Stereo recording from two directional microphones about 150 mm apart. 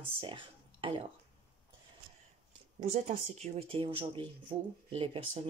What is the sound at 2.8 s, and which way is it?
Speech, 45° right (ahead or behind).